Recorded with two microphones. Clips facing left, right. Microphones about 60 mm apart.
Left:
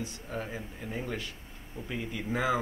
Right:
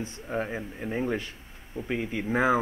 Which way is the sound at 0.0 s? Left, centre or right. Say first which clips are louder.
Right 6 dB; right.